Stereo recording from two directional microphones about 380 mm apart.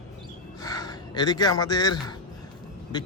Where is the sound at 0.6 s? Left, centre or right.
Centre.